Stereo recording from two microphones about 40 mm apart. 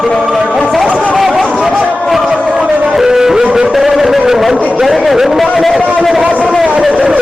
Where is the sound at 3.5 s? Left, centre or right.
Right.